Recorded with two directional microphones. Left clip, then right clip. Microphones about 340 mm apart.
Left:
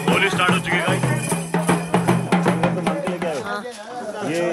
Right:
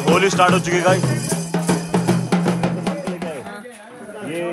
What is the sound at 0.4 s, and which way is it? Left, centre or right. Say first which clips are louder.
Speech: right 3 dB; centre.